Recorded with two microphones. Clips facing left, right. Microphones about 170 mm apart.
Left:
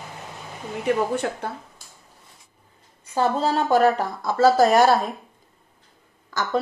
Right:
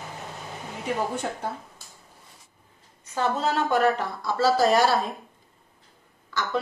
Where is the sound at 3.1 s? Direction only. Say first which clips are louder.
Left 4 dB; 35° left (ahead or behind); by 5.0 s 50° left (ahead or behind).